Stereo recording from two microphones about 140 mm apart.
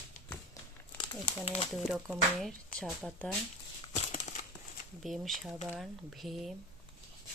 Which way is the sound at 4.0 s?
55° left (ahead or behind).